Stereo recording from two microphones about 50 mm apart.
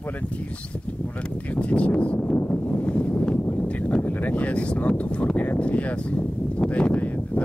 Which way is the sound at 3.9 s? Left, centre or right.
Left.